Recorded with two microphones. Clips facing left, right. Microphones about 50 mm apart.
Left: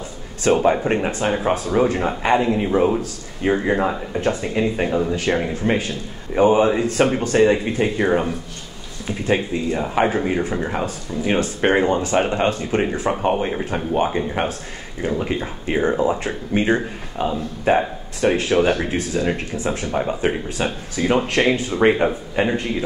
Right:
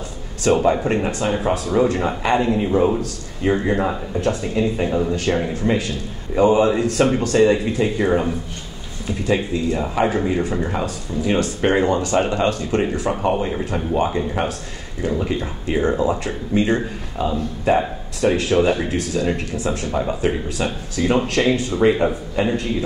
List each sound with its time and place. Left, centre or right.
0.5 s speech: left
0.8 s speech: left
2.2 s speech: left
4.1 s speech: left
13.3 s speech: centre
14.0 s speech: left